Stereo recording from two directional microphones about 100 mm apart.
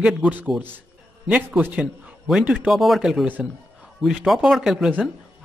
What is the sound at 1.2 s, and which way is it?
A man's voice, 5° right (ahead or behind).